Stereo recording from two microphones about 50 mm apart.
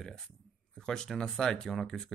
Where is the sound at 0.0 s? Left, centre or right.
Centre.